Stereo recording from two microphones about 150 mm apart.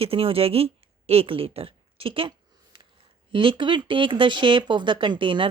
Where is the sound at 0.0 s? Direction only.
40° right (ahead or behind).